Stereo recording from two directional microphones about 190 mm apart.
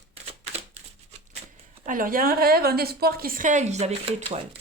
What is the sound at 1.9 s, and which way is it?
A woman's voice, 45° right (ahead or behind).